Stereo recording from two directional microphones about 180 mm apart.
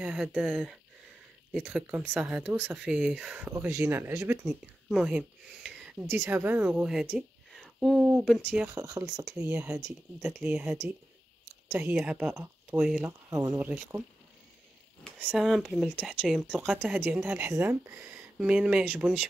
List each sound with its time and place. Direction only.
0.0 s a woman's voice: 5° right (ahead or behind)
8.6 s speech: 20° right (ahead or behind)
9.2 s speech: centre (ahead or behind)
9.5 s speech: 10° right (ahead or behind)
13.3 s speech: 15° right (ahead or behind)
15.0 s speech: 5° left (ahead or behind)